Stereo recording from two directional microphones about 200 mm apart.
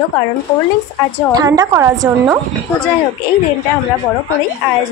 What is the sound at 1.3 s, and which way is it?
A woman's voice, 20° right (ahead or behind).